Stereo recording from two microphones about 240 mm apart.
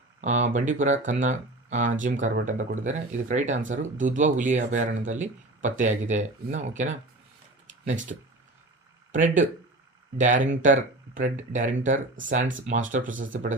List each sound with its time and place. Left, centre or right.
0.2 s speech: right
7.7 s a sound: right
9.1 s speech: right